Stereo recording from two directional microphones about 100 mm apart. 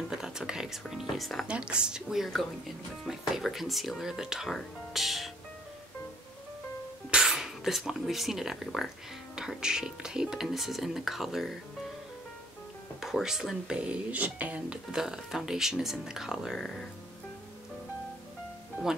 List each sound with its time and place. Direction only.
0.1 s speech: 5° right (ahead or behind)
1.5 s a woman's voice: 10° right (ahead or behind)
7.1 s speech: 5° right (ahead or behind)
13.0 s speech: 5° right (ahead or behind)
18.8 s speech: 15° right (ahead or behind)